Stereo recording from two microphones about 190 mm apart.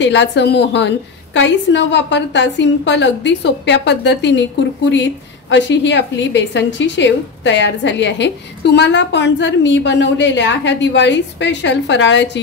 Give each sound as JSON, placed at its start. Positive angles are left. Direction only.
{"t": 0.0, "sound": "a woman's voice", "side_deg": 65}